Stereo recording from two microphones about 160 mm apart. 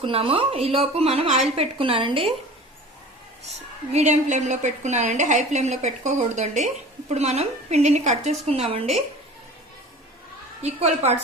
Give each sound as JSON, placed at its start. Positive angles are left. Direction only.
{"t": 0.0, "sound": "speech", "side_deg": -35}
{"t": 3.9, "sound": "a woman's voice", "side_deg": -45}
{"t": 10.6, "sound": "a woman's voice", "side_deg": -45}